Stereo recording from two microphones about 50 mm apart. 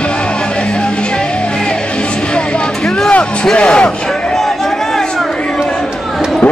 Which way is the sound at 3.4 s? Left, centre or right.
Left.